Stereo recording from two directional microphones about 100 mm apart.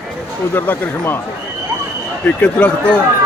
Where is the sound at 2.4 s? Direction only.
15° left (ahead or behind).